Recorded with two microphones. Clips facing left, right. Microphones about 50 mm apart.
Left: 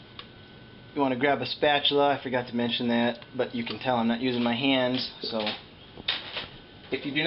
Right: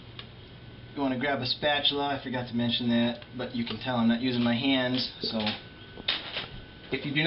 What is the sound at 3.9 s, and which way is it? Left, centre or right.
Speech, centre.